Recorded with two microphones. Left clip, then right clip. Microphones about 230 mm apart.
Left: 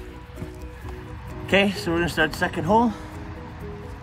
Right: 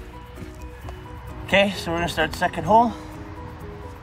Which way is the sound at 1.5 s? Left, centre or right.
Centre.